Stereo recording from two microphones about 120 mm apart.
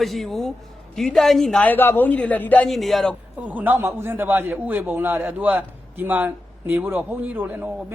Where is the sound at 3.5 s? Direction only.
15° right (ahead or behind).